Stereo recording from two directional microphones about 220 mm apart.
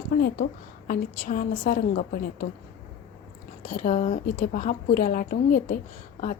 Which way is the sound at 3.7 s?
35° left (ahead or behind).